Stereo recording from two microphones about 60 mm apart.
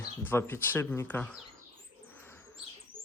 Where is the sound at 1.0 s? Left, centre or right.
Left.